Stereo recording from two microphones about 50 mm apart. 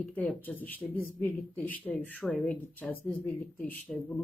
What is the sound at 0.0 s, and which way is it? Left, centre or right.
A woman's voice, left.